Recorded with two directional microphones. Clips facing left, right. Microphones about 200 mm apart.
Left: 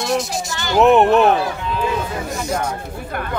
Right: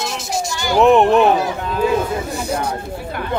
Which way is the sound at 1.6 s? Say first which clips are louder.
Right 3 dB; 45° right (ahead or behind).